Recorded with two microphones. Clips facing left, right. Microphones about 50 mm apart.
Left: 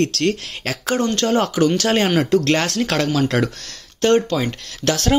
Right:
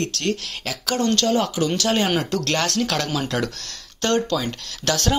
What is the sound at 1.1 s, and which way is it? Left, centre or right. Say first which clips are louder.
Speech: left 3 dB; left.